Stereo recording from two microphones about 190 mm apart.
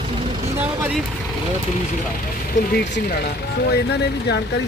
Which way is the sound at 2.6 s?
70° left (ahead or behind).